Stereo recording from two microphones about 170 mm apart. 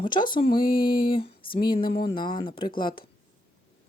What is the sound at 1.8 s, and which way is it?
Speech, 60° left (ahead or behind).